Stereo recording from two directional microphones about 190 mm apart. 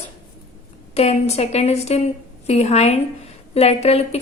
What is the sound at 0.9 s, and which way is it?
A woman's voice, 35° left (ahead or behind).